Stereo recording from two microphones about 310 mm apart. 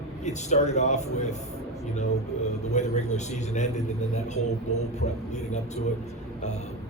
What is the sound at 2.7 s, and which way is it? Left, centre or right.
A man's voice, left.